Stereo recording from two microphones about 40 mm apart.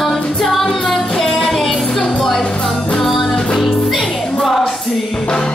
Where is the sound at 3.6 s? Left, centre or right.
Centre.